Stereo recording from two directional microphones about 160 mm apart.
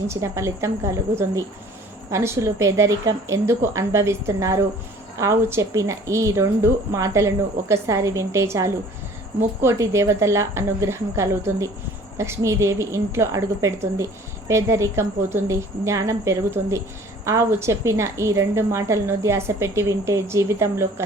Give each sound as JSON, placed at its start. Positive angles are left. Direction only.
{"t": 0.1, "sound": "a woman's voice", "side_deg": -20}